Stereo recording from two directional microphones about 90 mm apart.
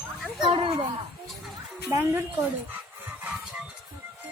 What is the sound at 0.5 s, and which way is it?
Speech, 80° right.